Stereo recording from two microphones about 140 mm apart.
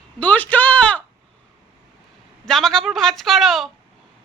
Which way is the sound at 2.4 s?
5° left (ahead or behind).